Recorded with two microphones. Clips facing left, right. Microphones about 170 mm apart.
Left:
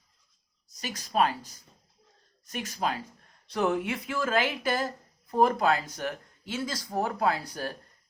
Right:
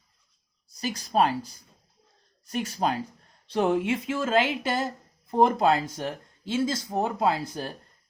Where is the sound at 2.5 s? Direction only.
30° right (ahead or behind).